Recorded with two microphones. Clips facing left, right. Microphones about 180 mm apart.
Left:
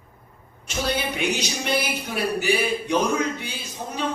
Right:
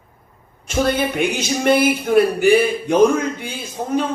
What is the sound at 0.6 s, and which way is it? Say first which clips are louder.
Speech: right 8 dB; 50° right (ahead or behind).